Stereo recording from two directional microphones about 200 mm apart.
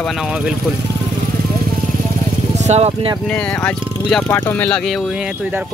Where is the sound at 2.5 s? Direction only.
35° right (ahead or behind).